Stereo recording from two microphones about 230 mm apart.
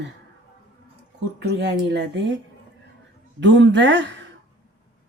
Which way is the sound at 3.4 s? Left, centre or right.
Right.